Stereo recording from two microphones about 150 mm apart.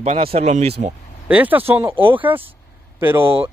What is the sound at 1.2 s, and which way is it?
Speech, 10° right (ahead or behind).